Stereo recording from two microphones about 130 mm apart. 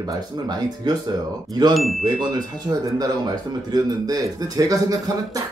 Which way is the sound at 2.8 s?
30° right (ahead or behind).